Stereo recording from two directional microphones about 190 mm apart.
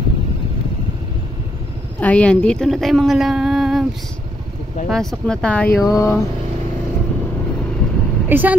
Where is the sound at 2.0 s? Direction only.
5° left (ahead or behind).